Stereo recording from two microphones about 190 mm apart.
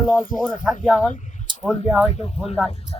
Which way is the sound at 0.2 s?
45° left (ahead or behind).